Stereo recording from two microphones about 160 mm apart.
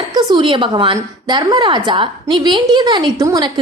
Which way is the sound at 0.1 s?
30° right (ahead or behind).